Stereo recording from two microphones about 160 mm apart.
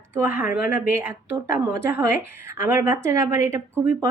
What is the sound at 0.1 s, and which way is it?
A woman's voice, 15° right (ahead or behind).